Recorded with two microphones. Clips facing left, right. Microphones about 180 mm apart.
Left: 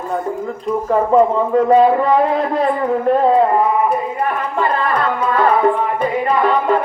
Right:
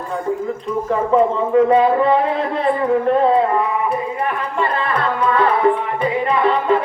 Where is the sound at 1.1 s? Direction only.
40° left (ahead or behind).